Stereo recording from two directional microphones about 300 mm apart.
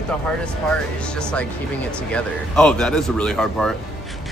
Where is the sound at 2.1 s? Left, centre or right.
Centre.